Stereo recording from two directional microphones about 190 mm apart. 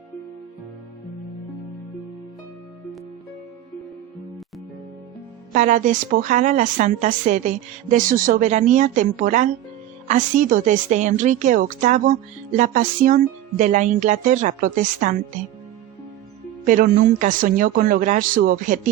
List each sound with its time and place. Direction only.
5.5 s a woman's voice: 40° right (ahead or behind)
16.6 s speech: 45° right (ahead or behind)